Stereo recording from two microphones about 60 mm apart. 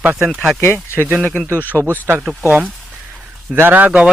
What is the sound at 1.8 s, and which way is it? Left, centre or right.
Speech, right.